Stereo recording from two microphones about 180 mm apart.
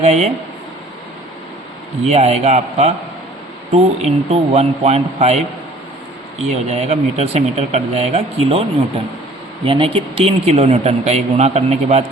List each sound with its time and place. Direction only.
0.0 s speech: 40° right (ahead or behind)
2.0 s speech: 35° right (ahead or behind)
6.5 s speech: 40° right (ahead or behind)
9.6 s speech: 30° right (ahead or behind)